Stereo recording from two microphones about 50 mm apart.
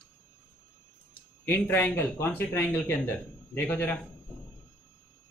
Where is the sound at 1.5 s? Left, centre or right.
Left.